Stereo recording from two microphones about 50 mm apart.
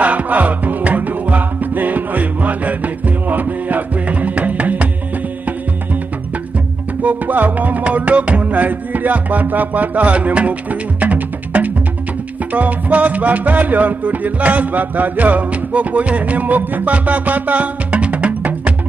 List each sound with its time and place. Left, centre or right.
0.0 s music: right
7.0 s music: right